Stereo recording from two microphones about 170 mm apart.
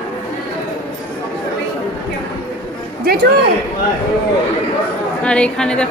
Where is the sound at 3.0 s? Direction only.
65° right (ahead or behind).